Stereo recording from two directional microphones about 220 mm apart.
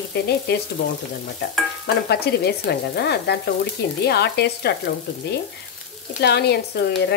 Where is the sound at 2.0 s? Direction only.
45° left (ahead or behind).